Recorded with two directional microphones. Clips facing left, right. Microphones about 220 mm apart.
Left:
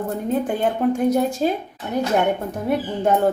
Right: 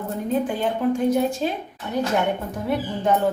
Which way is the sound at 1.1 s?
40° left (ahead or behind).